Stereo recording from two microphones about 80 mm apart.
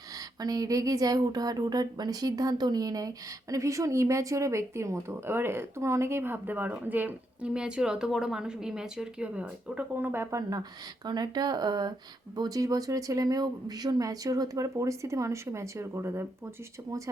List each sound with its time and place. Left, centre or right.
0.3 s speech: right
10.3 s speech: right